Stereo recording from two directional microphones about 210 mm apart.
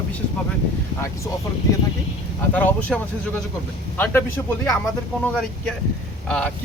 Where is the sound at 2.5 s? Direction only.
5° left (ahead or behind).